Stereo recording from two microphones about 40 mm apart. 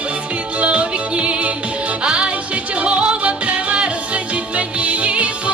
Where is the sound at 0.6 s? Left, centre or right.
Right.